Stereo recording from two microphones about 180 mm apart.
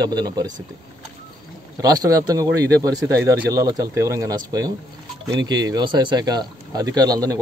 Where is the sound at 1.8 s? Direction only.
20° right (ahead or behind).